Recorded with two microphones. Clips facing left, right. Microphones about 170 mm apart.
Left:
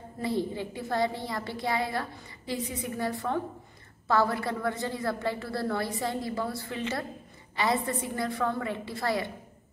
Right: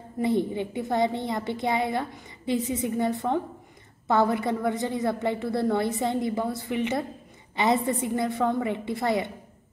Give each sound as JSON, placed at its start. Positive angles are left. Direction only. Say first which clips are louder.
{"t": 0.2, "sound": "a woman's voice", "louder": "right 5 dB", "side_deg": -20}